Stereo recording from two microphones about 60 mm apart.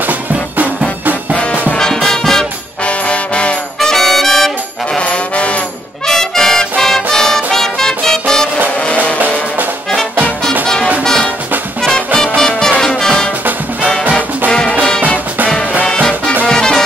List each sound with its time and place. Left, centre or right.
1.8 s music: centre
3.1 s trombone: centre
3.8 s brass instrument: centre
4.9 s music: centre
6.0 s music: centre
12.4 s music: centre
14.5 s music: centre
16.4 s music: centre